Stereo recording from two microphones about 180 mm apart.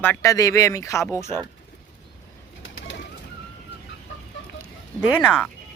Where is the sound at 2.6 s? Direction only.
90° left.